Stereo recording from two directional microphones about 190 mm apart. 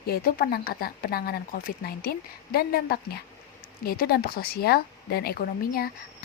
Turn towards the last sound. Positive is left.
turn(degrees=50)  # may be behind; listen again after turning